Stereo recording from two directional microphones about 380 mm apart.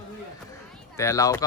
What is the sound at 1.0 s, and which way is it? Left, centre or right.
Speech, centre.